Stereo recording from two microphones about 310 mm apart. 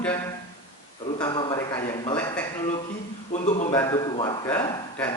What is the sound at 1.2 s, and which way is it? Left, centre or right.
A man's voice, centre.